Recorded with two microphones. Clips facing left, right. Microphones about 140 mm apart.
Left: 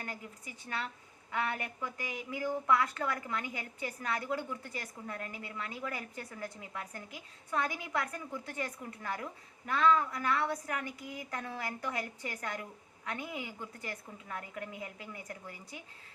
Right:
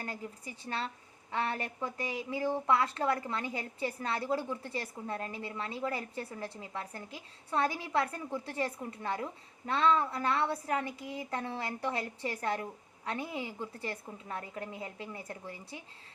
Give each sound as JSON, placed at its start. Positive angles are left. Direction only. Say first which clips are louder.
{"t": 0.0, "sound": "a woman's voice", "louder": "right 3 dB", "side_deg": -30}